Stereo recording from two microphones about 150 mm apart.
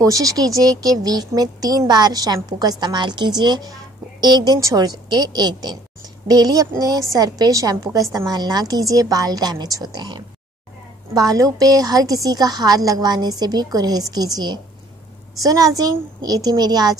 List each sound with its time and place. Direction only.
0.0 s a woman's voice: 20° right (ahead or behind)